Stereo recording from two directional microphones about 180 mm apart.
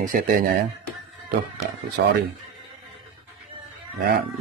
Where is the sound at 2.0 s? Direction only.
75° right (ahead or behind).